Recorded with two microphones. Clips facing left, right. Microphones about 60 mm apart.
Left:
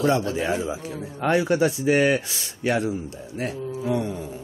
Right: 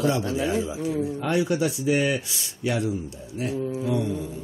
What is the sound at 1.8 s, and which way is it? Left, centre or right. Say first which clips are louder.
Speech: left 3 dB; left.